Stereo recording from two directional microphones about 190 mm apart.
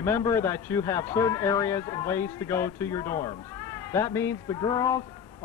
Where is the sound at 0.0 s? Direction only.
15° left (ahead or behind).